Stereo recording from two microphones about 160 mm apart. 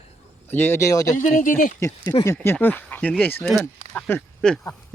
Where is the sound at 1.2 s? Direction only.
55° left (ahead or behind).